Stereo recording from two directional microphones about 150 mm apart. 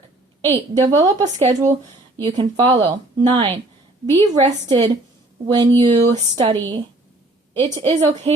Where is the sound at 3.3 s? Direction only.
40° right (ahead or behind).